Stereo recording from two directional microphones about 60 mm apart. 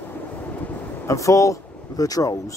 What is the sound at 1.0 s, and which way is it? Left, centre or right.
Speech, left.